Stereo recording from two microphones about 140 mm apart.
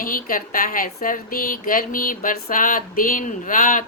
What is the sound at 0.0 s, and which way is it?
Speech, 85° left.